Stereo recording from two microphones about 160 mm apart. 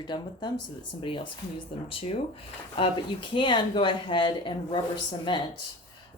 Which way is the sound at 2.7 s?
30° left (ahead or behind).